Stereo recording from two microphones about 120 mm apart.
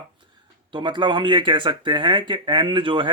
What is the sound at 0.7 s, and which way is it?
Speech, 40° right (ahead or behind).